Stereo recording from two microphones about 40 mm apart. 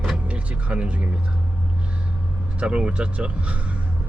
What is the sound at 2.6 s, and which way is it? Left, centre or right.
Speech, right.